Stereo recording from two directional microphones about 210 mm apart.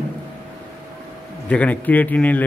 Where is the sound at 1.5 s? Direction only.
5° left (ahead or behind).